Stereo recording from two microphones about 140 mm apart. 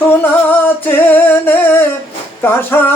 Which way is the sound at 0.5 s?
15° left (ahead or behind).